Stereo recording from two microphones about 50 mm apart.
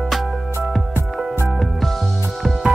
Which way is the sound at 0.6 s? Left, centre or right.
Right.